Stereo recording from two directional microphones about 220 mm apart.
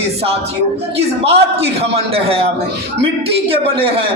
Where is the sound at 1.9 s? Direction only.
25° right (ahead or behind).